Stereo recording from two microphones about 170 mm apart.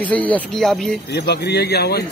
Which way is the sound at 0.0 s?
10° left (ahead or behind).